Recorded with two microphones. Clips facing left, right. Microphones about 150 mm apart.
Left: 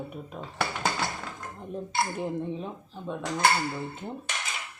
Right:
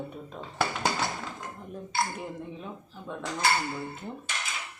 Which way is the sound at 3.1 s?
20° left (ahead or behind).